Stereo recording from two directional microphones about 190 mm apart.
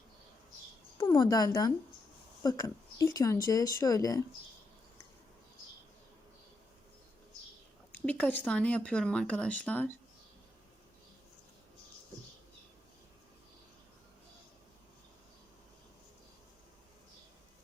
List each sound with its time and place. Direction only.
0.9 s speech: 20° left (ahead or behind)
7.9 s speech: 10° left (ahead or behind)